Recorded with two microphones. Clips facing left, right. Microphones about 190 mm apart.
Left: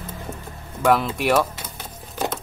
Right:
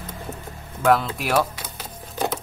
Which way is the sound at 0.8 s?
Centre (ahead or behind).